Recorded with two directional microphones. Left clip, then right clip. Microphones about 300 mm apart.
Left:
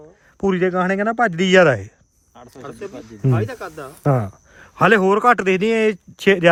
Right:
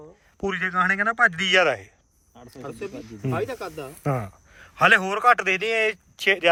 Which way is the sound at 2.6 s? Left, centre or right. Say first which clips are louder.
Left 2 dB; centre.